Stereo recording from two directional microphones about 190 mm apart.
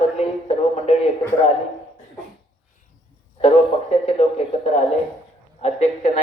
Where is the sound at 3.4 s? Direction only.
35° left (ahead or behind).